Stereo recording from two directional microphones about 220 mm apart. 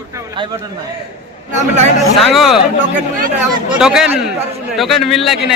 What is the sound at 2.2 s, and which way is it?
Speech, centre (ahead or behind).